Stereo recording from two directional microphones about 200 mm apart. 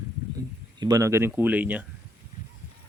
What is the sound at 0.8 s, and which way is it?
Speech, 20° right (ahead or behind).